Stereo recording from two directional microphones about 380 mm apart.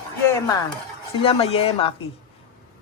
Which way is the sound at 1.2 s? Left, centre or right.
Centre.